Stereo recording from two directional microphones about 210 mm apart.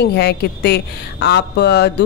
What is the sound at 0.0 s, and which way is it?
Speech, 50° left (ahead or behind).